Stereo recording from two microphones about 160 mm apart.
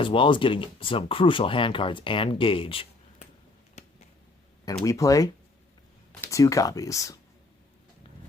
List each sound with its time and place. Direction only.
0.0 s speech: 35° left (ahead or behind)
3.8 s finger snapping: 45° left (ahead or behind)
4.6 s speech: 20° left (ahead or behind)